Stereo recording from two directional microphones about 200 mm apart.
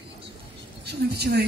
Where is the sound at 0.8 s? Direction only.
55° right (ahead or behind).